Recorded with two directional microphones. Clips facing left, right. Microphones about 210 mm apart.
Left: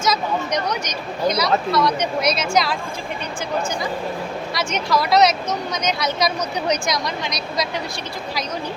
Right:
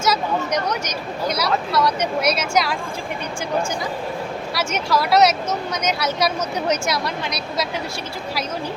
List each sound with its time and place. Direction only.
0.0 s speech: 10° right (ahead or behind)
4.5 s a woman's voice: 10° right (ahead or behind)